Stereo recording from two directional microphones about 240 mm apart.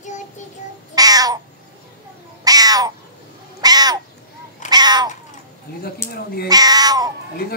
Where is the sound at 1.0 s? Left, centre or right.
Centre.